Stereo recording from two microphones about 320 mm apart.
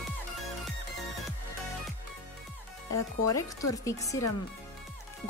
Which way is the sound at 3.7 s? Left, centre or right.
Centre.